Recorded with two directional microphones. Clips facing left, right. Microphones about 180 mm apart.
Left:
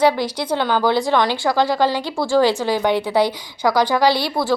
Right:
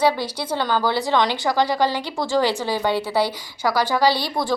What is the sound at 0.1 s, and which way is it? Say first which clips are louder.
Speech: left 4 dB; 10° right (ahead or behind).